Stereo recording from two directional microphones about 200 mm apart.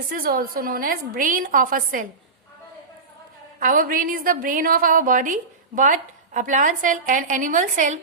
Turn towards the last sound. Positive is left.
turn(degrees=-40)  # may be behind; listen again after turning